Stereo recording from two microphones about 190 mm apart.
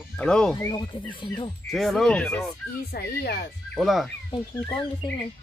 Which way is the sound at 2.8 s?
55° left (ahead or behind).